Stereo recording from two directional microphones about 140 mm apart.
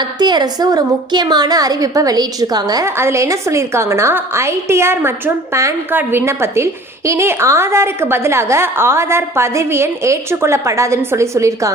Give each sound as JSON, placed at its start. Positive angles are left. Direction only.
{"t": 0.2, "sound": "a woman's voice", "side_deg": -30}